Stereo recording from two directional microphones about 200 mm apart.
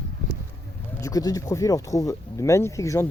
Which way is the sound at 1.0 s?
20° left (ahead or behind).